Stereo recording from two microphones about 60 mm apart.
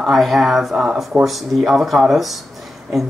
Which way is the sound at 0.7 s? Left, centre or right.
Centre.